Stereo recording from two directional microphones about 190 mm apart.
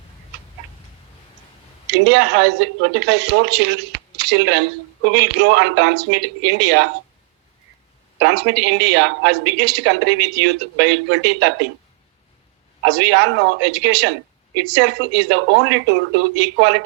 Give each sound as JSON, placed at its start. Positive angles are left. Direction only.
{"t": 1.9, "sound": "speech", "side_deg": -65}
{"t": 8.2, "sound": "speech", "side_deg": -65}
{"t": 12.8, "sound": "speech", "side_deg": -65}